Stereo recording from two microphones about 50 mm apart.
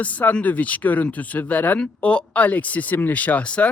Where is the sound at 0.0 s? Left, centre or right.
Left.